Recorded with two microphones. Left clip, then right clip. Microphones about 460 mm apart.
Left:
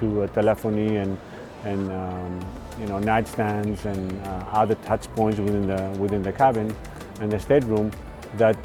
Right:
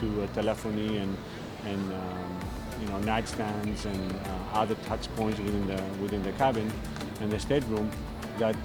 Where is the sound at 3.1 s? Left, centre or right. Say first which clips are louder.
Left 9 dB; left.